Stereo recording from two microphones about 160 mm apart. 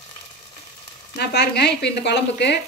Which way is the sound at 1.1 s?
90° left.